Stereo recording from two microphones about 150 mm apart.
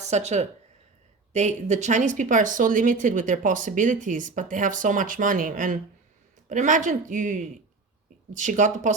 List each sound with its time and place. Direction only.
0.0 s speech: 50° right (ahead or behind)